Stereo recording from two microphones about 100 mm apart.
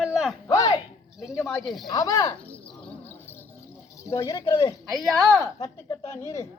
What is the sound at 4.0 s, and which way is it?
Speech, 30° left (ahead or behind).